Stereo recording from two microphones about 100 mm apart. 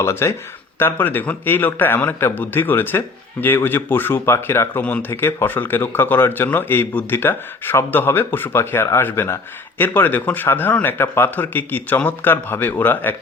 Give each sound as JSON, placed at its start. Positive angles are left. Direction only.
{"t": 0.0, "sound": "speech", "side_deg": 25}
{"t": 4.8, "sound": "speech", "side_deg": 15}